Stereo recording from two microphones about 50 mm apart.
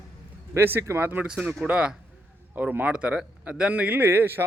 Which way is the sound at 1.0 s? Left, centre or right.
Right.